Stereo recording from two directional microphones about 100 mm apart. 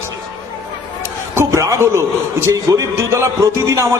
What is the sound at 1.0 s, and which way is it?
A man's voice, 30° right (ahead or behind).